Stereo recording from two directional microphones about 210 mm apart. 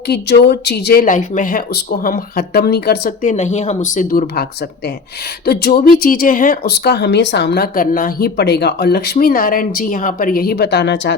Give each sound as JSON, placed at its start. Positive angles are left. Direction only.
{"t": 0.1, "sound": "speech", "side_deg": 50}
{"t": 3.3, "sound": "speech", "side_deg": 35}
{"t": 5.5, "sound": "speech", "side_deg": 45}